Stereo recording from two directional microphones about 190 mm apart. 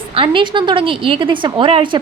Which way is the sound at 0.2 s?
25° right (ahead or behind).